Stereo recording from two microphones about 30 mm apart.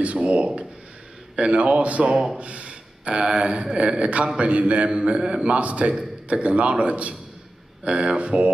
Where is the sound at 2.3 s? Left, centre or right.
Right.